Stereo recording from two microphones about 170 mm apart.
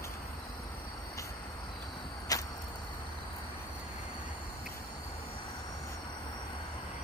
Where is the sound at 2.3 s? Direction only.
20° left (ahead or behind).